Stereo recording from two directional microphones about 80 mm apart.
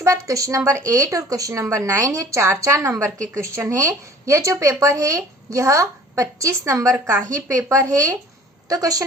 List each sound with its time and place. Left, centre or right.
0.0 s a woman's voice: right